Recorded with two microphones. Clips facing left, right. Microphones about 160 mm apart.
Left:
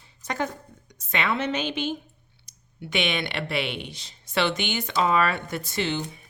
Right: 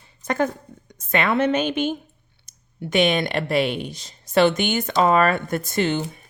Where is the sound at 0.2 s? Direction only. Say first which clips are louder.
Right 7 dB; 50° right (ahead or behind).